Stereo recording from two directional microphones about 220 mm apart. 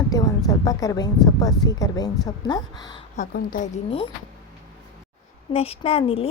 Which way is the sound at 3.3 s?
40° left (ahead or behind).